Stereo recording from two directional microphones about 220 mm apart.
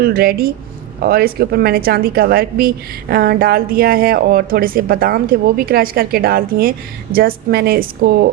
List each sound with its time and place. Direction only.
0.0 s a woman's voice: 45° right (ahead or behind)